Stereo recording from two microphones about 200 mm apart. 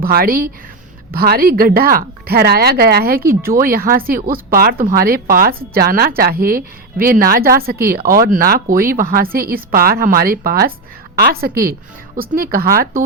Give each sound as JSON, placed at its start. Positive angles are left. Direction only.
{"t": 0.0, "sound": "speech", "side_deg": -50}